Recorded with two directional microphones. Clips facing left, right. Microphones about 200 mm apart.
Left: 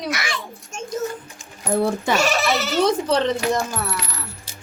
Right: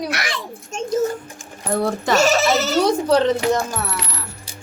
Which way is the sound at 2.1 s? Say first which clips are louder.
Right 8 dB; 40° right (ahead or behind).